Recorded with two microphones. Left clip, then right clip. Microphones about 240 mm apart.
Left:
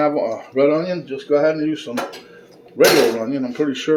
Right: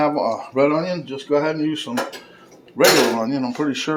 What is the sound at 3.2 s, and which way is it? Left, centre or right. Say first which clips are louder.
Speech: left 1 dB; right.